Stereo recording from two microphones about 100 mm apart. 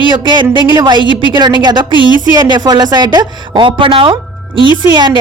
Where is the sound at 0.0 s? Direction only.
50° right (ahead or behind).